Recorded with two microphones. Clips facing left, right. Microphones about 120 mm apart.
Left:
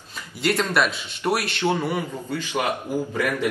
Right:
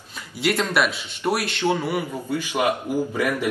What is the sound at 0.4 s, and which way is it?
A man's voice, 5° right (ahead or behind).